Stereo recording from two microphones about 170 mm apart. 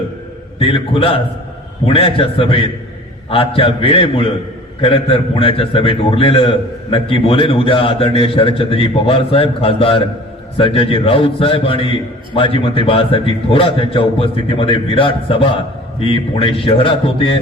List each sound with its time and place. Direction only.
0.6 s a man's voice: 30° left (ahead or behind)